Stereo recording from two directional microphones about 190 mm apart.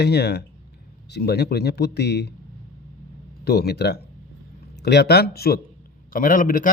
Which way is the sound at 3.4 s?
60° left (ahead or behind).